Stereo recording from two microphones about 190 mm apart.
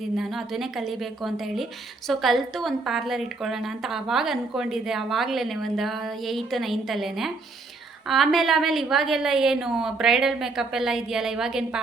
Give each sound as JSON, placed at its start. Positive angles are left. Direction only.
{"t": 0.2, "sound": "a woman's voice", "side_deg": 0}